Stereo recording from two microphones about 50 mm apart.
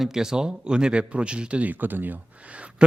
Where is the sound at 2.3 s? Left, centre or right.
Right.